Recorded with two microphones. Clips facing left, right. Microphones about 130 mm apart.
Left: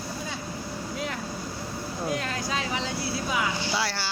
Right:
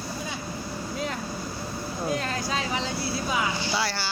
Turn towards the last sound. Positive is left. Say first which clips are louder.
# right 1 dB
turn(degrees=0)  # may be behind; listen again after turning